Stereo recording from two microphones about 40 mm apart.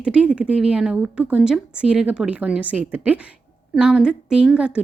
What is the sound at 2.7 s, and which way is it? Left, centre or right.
Speech, right.